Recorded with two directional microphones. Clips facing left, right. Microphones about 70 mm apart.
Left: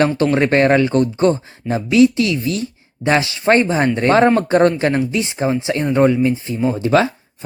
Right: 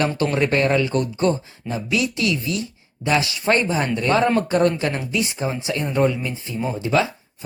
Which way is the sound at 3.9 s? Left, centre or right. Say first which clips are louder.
Left 5 dB; left.